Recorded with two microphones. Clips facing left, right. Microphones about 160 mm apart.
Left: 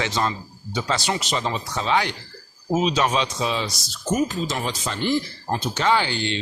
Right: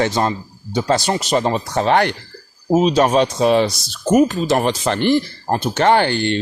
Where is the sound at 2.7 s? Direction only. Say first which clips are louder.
Right 7 dB; 40° right (ahead or behind).